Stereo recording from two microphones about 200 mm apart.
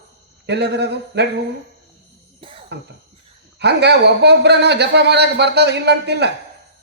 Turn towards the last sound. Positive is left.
turn(degrees=-55)  # may be behind; listen again after turning